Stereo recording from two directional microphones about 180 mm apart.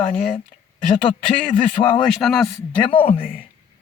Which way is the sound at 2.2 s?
Centre (ahead or behind).